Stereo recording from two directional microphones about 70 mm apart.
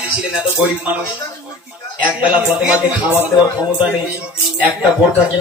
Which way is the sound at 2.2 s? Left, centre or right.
Centre.